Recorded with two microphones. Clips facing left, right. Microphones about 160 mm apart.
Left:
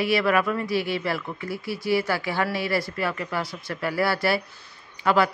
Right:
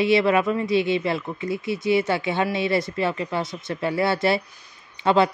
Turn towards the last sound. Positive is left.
turn(degrees=-25)  # may be behind; listen again after turning